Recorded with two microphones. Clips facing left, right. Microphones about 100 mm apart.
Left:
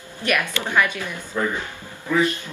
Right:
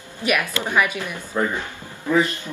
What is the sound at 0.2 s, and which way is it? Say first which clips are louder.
Speech: right 1 dB; 10° right (ahead or behind).